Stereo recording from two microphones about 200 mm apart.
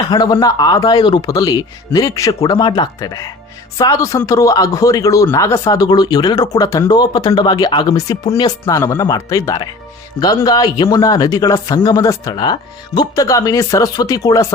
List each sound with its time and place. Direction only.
0.1 s a man's voice: 20° left (ahead or behind)